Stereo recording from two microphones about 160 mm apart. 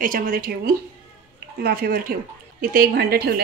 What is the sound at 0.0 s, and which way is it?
Speech, 60° right (ahead or behind).